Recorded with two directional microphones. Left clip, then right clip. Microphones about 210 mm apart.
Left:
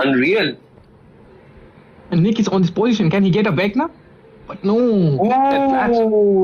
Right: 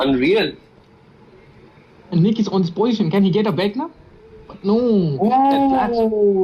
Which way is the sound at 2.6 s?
50° left (ahead or behind).